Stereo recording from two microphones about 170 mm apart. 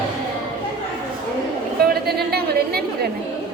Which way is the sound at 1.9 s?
70° right (ahead or behind).